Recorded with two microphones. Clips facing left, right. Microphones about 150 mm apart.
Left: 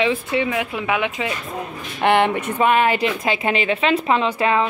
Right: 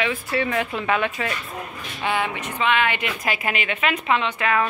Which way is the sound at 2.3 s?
45° left (ahead or behind).